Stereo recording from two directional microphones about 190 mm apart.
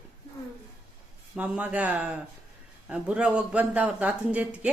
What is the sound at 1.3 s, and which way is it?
A man's voice, 5° right (ahead or behind).